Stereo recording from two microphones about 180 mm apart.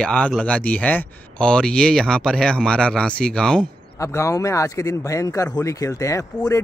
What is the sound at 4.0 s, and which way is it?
Speech, 15° left (ahead or behind).